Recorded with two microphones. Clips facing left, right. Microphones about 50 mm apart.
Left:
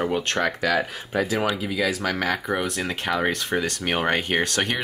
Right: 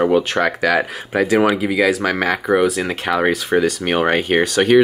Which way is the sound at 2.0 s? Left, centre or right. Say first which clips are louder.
Right 6 dB; centre.